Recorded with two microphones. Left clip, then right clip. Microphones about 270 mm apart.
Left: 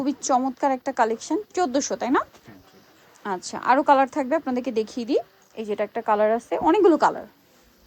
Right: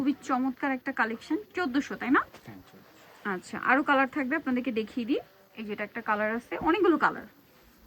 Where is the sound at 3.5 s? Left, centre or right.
Centre.